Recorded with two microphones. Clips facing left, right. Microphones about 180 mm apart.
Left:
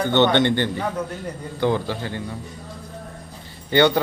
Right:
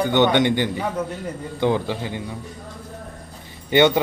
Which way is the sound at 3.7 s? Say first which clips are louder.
Right 1 dB; 20° right (ahead or behind).